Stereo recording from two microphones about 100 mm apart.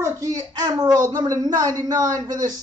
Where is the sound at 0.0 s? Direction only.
35° right (ahead or behind).